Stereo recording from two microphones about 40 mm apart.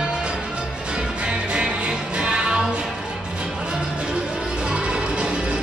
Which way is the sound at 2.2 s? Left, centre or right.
Right.